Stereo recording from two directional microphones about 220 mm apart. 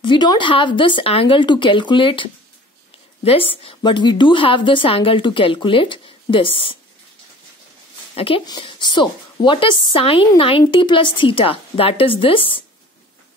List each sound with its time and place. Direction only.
0.0 s a woman's voice: 20° left (ahead or behind)
3.3 s a woman's voice: 25° left (ahead or behind)
8.1 s a woman's voice: 25° left (ahead or behind)